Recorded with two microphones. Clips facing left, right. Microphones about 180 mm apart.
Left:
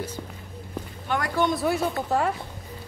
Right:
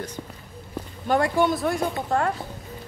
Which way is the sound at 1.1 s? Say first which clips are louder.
Right 6 dB; 40° right (ahead or behind).